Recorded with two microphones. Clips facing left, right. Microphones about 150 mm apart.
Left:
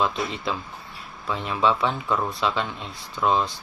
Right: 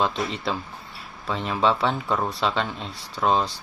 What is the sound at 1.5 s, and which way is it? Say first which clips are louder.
Speech: even; 35° right (ahead or behind).